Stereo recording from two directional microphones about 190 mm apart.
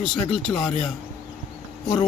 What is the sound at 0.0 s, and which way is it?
Speech, centre (ahead or behind).